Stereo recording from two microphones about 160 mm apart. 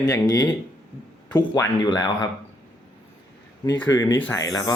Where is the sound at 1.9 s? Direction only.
25° left (ahead or behind).